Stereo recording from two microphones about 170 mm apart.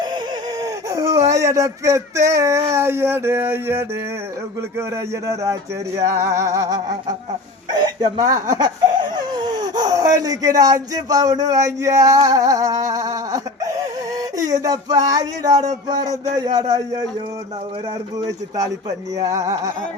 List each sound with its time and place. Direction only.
0.6 s speech: 20° right (ahead or behind)
5.2 s speech: 20° right (ahead or behind)
18.2 s speech: 20° right (ahead or behind)